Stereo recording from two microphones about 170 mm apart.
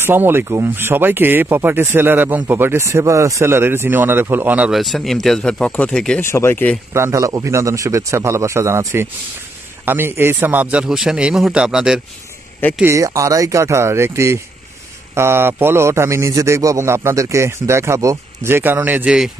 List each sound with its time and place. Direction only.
0.0 s speech: 15° right (ahead or behind); by 6.8 s 10° left (ahead or behind)
6.9 s speech: 15° right (ahead or behind)
12.8 s speech: 20° right (ahead or behind)